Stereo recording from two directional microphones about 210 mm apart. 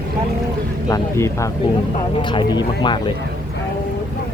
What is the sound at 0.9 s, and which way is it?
Speech, 15° left (ahead or behind).